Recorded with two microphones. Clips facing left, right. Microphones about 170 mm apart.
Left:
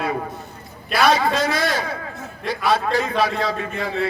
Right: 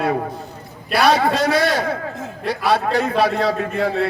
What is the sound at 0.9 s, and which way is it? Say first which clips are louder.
A man's voice: right 2 dB; 65° right (ahead or behind).